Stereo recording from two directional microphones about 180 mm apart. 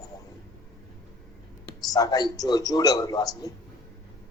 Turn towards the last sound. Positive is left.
turn(degrees=20)  # may be behind; listen again after turning